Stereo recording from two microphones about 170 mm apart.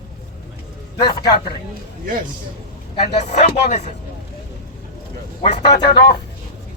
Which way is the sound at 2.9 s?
40° left (ahead or behind).